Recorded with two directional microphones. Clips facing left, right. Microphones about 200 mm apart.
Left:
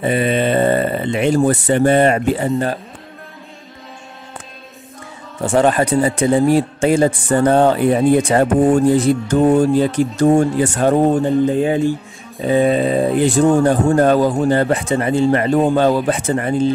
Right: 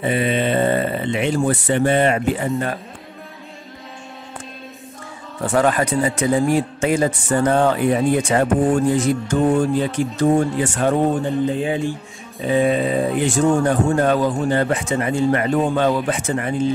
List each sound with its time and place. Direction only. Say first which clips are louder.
0.0 s speech: left 3 dB; 40° left (ahead or behind)
5.4 s speech: left 3 dB; 25° left (ahead or behind)